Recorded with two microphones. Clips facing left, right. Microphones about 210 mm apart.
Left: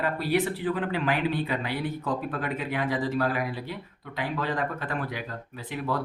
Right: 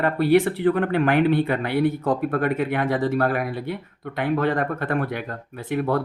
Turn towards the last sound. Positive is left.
turn(degrees=-55)  # may be behind; listen again after turning